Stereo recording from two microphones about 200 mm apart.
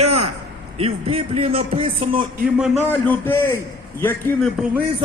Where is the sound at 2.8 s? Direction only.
10° left (ahead or behind).